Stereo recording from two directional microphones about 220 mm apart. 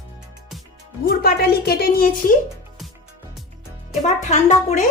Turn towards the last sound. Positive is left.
turn(degrees=30)  # may be behind; listen again after turning